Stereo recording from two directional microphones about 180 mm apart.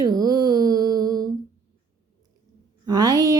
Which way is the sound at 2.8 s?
20° right (ahead or behind).